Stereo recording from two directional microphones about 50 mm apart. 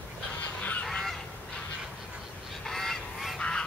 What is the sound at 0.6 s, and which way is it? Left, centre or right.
Goose, left.